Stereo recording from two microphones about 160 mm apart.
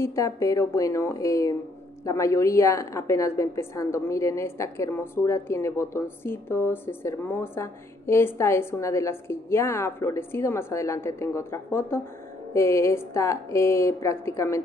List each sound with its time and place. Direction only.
0.0 s a woman's voice: 20° left (ahead or behind)